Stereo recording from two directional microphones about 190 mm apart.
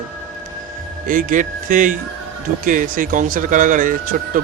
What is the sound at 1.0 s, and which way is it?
Speech, 45° right (ahead or behind).